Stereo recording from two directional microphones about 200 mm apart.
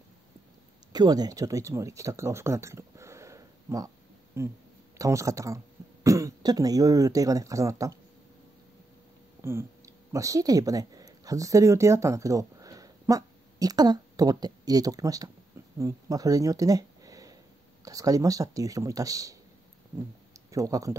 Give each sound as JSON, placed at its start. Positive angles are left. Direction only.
{"t": 0.9, "sound": "speech", "side_deg": -20}
{"t": 9.4, "sound": "speech", "side_deg": -15}
{"t": 20.5, "sound": "speech", "side_deg": -15}